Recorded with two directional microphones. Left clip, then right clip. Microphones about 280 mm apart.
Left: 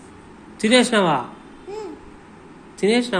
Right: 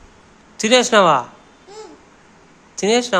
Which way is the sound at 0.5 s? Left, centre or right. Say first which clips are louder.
Right 4 dB; right.